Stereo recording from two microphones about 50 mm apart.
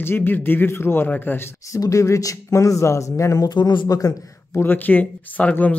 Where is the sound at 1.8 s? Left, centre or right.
Left.